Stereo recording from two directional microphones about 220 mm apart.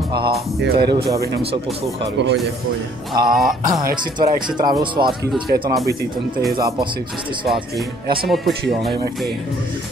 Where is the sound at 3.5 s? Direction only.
40° right (ahead or behind).